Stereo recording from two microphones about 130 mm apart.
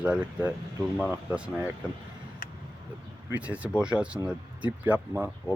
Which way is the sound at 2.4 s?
90° left.